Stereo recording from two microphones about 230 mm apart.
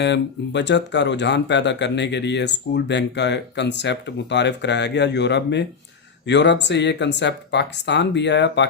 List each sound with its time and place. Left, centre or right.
0.0 s speech: left